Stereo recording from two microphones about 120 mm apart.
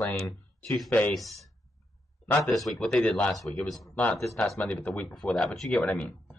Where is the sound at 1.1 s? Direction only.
Centre (ahead or behind).